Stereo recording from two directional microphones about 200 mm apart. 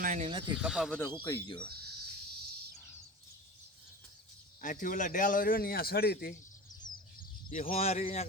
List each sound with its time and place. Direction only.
0.0 s a sound: 40° right (ahead or behind)
0.4 s speech: 5° right (ahead or behind)
0.9 s speech: 10° left (ahead or behind)
1.1 s speech: 20° left (ahead or behind)
4.6 s a man's voice: 40° left (ahead or behind)
6.8 s bird: 20° left (ahead or behind)
7.2 s bird: 45° left (ahead or behind)
7.8 s speech: 35° left (ahead or behind)